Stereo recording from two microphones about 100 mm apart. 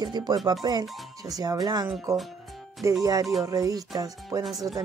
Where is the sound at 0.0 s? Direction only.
45° right (ahead or behind).